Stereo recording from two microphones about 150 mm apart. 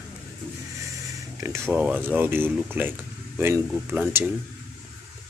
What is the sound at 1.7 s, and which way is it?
Speech, 10° right (ahead or behind).